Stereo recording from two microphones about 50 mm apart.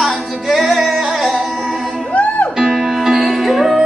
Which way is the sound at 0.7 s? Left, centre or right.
Centre.